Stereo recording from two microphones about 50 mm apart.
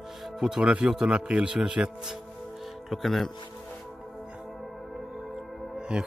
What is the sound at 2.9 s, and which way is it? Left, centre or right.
Speech, centre.